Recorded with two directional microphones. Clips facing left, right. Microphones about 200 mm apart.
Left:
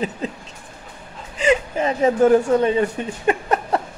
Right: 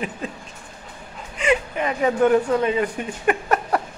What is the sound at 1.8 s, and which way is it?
A man's voice, 25° left (ahead or behind).